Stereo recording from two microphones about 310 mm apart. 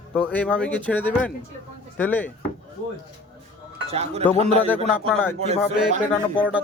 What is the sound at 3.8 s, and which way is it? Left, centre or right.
Speech, centre.